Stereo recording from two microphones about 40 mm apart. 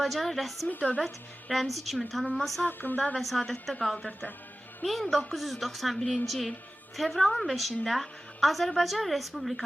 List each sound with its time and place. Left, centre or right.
0.0 s a woman's voice: centre
0.7 s speech: left
1.5 s a woman's voice: centre
2.6 s speech: left
3.2 s a woman's voice: centre
3.9 s speech: left
4.9 s a woman's voice: centre